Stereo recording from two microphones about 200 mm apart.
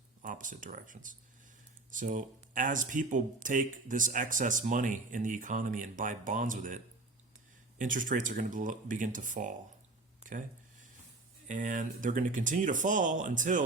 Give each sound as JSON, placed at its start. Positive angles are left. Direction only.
{"t": 0.2, "sound": "speech", "side_deg": -40}
{"t": 7.8, "sound": "speech", "side_deg": -40}
{"t": 10.2, "sound": "a sound", "side_deg": -40}
{"t": 11.4, "sound": "speech", "side_deg": -40}